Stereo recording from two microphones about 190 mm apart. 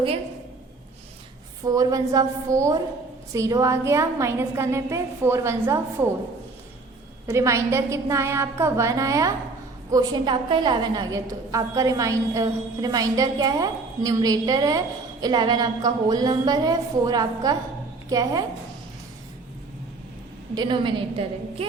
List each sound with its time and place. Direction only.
1.6 s a woman's voice: 20° right (ahead or behind)
7.3 s a woman's voice: 15° right (ahead or behind)
20.6 s a woman's voice: 25° right (ahead or behind)